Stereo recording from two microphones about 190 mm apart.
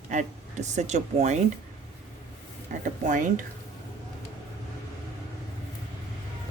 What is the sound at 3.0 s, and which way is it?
Speech, 40° right (ahead or behind).